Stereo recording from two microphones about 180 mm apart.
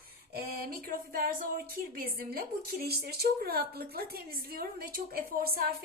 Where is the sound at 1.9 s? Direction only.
55° right (ahead or behind).